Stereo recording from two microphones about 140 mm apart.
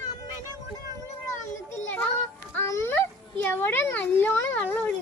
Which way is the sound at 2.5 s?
20° left (ahead or behind).